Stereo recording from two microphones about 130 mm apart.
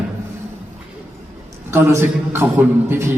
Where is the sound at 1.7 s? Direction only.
20° right (ahead or behind).